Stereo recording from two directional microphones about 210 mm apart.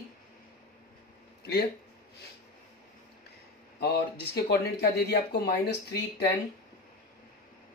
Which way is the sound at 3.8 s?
50° left (ahead or behind).